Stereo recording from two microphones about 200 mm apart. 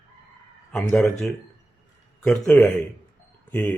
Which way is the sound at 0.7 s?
Centre (ahead or behind).